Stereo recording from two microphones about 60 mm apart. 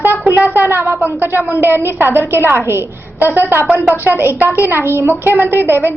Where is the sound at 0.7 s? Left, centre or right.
Right.